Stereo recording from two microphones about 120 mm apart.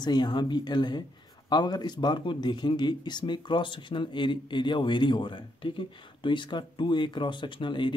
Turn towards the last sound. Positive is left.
turn(degrees=40)  # may be behind; listen again after turning